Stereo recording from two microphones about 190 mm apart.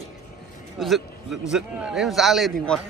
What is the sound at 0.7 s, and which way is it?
A man's voice, centre (ahead or behind).